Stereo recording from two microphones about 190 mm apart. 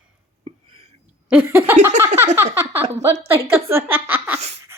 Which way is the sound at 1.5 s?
10° right (ahead or behind).